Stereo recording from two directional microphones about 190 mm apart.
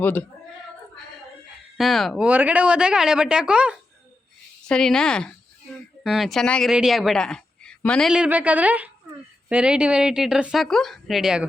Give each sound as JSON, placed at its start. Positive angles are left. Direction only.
{"t": 0.0, "sound": "speech", "side_deg": 10}
{"t": 1.8, "sound": "speech", "side_deg": 0}